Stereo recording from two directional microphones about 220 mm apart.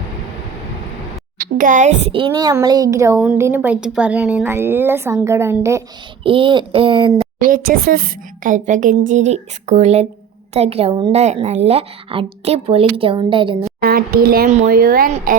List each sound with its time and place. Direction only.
1.4 s a child's voice: 35° right (ahead or behind); by 5.8 s 10° right (ahead or behind)
6.2 s a woman's voice: 25° right (ahead or behind)
7.3 s a woman's voice: 40° right (ahead or behind); by 13.7 s 25° right (ahead or behind)
13.8 s a woman's voice: 45° right (ahead or behind)